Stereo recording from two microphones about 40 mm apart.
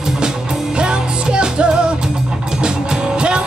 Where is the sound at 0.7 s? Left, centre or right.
Right.